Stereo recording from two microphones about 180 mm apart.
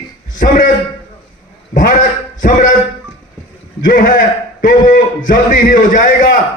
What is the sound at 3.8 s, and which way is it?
Speech, 50° left (ahead or behind).